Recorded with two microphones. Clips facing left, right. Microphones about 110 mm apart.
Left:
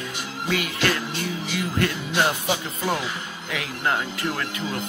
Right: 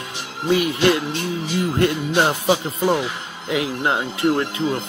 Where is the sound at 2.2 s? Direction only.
25° right (ahead or behind).